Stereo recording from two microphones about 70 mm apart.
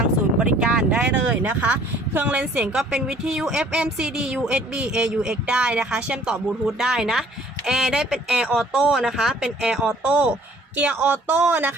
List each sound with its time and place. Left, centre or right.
0.3 s speech: centre
10.0 s speech: right